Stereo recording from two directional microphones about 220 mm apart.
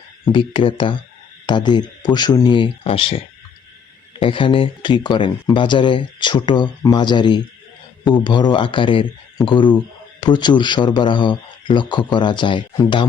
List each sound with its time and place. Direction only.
0.3 s speech: 25° left (ahead or behind)